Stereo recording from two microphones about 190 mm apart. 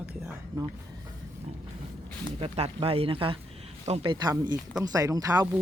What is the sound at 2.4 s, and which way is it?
Speech, 30° right (ahead or behind).